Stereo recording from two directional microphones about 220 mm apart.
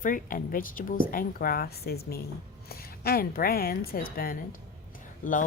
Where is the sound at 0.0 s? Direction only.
40° left (ahead or behind).